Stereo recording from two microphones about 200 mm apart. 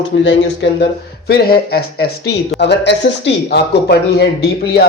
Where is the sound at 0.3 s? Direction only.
60° left (ahead or behind).